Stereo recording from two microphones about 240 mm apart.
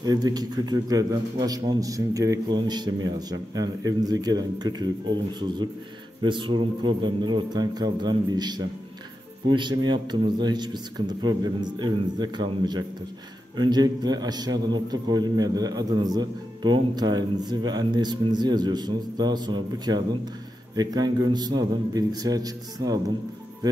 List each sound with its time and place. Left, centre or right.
0.0 s a man's voice: centre